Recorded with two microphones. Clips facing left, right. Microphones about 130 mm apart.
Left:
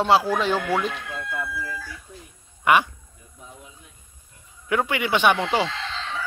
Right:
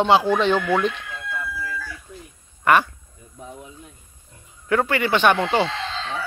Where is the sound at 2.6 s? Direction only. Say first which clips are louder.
Right 1 dB; 10° left (ahead or behind).